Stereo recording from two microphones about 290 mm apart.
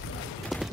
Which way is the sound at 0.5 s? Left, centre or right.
Centre.